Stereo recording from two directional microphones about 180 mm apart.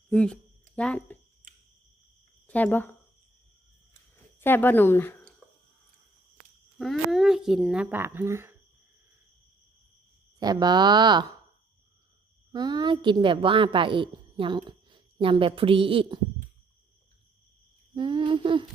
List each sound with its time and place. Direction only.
0.1 s speech: 5° left (ahead or behind)
1.4 s cricket: 45° right (ahead or behind)
2.5 s speech: 10° left (ahead or behind)
4.4 s speech: 10° left (ahead or behind)
6.7 s speech: centre (ahead or behind); by 8.5 s 15° right (ahead or behind)
10.4 s speech: 20° right (ahead or behind)
12.5 s a woman's voice: 25° right (ahead or behind)
17.9 s humming: 25° right (ahead or behind)